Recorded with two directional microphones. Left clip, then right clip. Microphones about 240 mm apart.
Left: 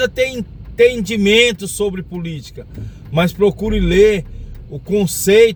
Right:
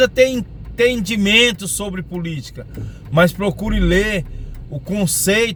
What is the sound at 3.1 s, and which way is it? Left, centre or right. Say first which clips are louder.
A man's voice: left 1 dB; centre.